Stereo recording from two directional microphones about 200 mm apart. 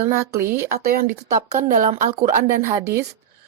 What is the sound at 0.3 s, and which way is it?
Speech, 10° right (ahead or behind).